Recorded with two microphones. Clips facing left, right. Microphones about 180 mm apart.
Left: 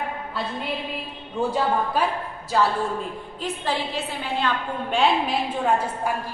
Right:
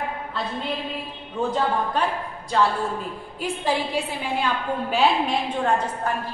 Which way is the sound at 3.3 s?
10° right (ahead or behind).